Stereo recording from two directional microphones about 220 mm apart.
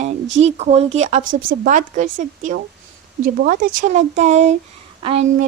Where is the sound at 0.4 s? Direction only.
30° right (ahead or behind).